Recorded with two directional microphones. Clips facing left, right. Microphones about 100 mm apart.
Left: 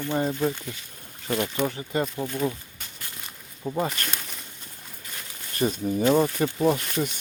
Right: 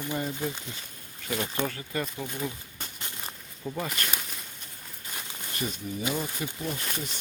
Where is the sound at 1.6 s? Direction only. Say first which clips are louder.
Left 5 dB; 20° left (ahead or behind).